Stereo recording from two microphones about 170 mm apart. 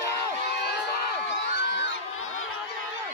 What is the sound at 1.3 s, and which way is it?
Crowd, 90° left.